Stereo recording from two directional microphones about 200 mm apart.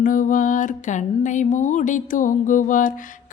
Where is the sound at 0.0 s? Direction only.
40° left (ahead or behind).